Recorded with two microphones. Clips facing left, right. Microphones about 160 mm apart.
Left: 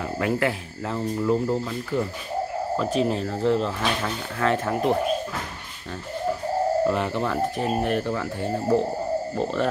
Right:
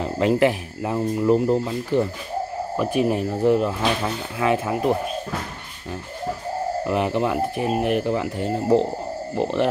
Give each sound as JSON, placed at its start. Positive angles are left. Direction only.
{"t": 0.0, "sound": "speech", "side_deg": -20}
{"t": 2.8, "sound": "speech", "side_deg": -10}
{"t": 6.9, "sound": "speech", "side_deg": -15}